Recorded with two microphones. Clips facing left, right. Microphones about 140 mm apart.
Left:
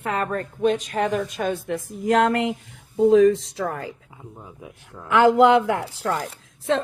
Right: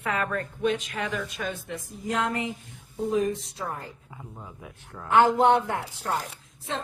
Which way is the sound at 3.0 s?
90° left.